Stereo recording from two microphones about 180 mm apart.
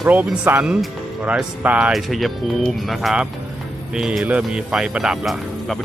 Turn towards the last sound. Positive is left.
turn(degrees=0)  # may be behind; listen again after turning